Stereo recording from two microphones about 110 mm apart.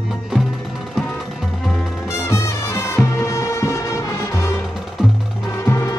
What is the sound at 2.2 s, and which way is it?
Music, 25° left (ahead or behind).